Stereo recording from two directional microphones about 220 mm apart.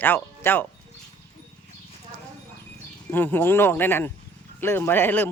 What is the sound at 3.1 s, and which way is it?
Speech, 10° left (ahead or behind).